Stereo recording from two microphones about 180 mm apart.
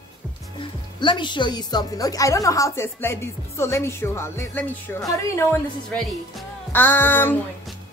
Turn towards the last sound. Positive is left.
turn(degrees=10)  # may be behind; listen again after turning